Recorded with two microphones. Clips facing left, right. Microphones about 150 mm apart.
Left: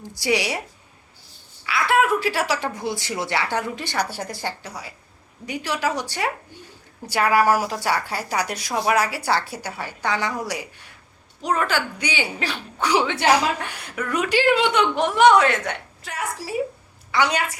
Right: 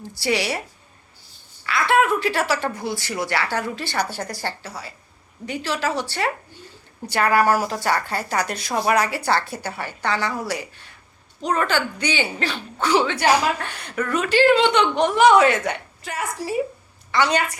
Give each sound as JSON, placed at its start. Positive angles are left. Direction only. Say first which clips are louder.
{"t": 0.1, "sound": "a woman's voice", "louder": "even", "side_deg": 15}
{"t": 1.6, "sound": "a woman's voice", "louder": "right 1 dB", "side_deg": 5}